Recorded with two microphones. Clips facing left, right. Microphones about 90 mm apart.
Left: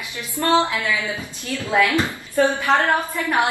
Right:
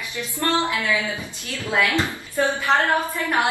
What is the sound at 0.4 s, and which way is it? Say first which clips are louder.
A woman's voice: left 4 dB; 20° left (ahead or behind).